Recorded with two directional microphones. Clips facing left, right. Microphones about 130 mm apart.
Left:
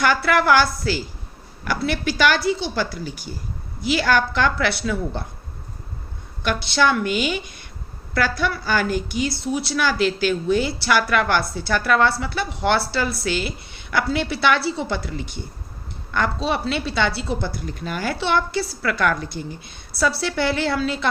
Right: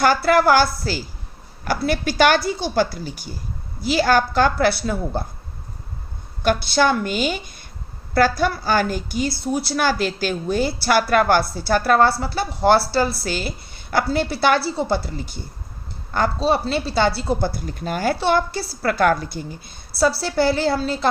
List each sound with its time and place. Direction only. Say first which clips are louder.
0.0 s a woman's voice: right 3 dB; 40° right (ahead or behind)
6.4 s a woman's voice: right 2 dB; 45° right (ahead or behind)